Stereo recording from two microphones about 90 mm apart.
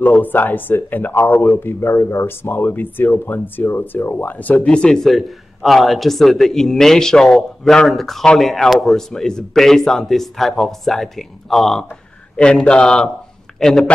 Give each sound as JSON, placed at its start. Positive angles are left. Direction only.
{"t": 0.2, "sound": "a man's voice", "side_deg": 20}